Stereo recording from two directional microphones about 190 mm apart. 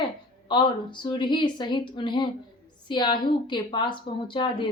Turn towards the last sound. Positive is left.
turn(degrees=25)  # may be behind; listen again after turning